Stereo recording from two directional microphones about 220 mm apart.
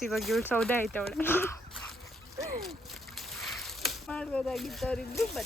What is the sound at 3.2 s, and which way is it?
Speech, centre (ahead or behind).